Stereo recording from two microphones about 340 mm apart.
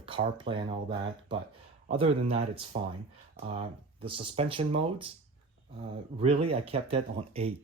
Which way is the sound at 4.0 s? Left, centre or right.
Centre.